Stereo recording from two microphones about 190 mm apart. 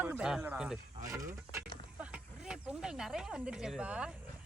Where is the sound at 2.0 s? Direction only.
5° right (ahead or behind).